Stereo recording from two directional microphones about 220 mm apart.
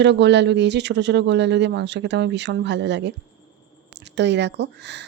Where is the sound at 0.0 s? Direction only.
50° right (ahead or behind).